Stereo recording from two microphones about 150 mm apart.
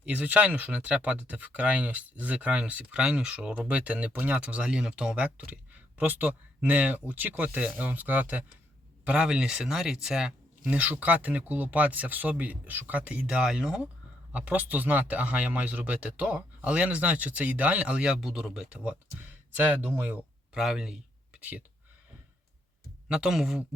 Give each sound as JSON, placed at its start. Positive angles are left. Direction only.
{"t": 0.0, "sound": "speech", "side_deg": -10}
{"t": 23.0, "sound": "speech", "side_deg": -5}